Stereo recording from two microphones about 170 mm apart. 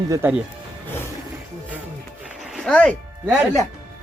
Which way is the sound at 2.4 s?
Centre (ahead or behind).